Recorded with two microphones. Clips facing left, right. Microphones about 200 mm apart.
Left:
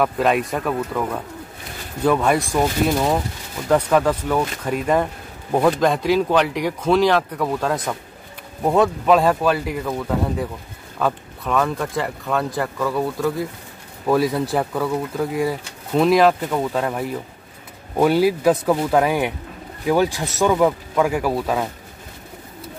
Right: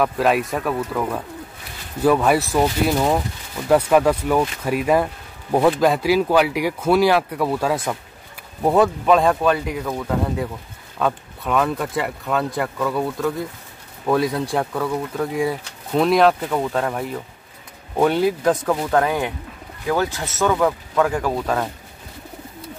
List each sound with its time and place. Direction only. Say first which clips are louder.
0.0 s a man's voice: even; centre (ahead or behind)